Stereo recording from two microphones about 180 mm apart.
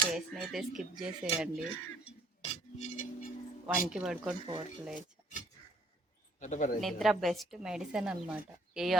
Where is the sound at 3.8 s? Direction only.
5° right (ahead or behind).